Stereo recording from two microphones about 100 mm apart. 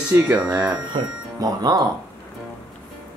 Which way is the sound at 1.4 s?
40° right (ahead or behind).